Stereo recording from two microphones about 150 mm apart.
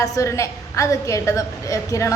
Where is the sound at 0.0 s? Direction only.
20° left (ahead or behind).